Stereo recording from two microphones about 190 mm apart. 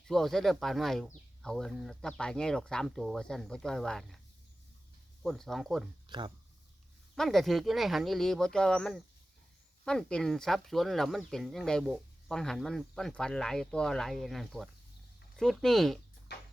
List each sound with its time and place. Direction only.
0.1 s speech: centre (ahead or behind)
5.2 s speech: centre (ahead or behind)
6.1 s speech: 25° right (ahead or behind)
7.2 s speech: centre (ahead or behind)